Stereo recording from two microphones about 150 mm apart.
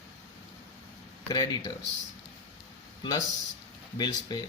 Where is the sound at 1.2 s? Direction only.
25° left (ahead or behind).